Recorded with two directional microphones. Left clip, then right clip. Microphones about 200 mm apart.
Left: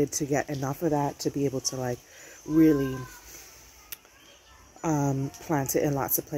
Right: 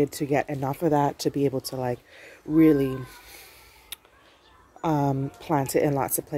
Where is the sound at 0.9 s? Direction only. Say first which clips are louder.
Right 5 dB; 15° right (ahead or behind).